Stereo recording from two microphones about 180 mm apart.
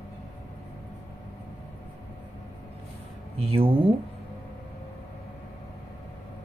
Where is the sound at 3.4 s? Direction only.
30° right (ahead or behind).